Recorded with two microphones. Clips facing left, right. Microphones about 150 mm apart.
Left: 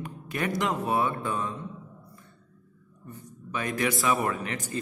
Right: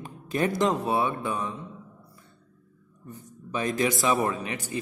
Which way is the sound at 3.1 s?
20° right (ahead or behind).